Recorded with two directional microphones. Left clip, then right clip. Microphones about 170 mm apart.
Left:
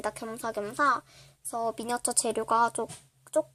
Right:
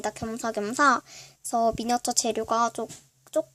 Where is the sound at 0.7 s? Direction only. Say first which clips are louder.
Right 5 dB; 35° right (ahead or behind).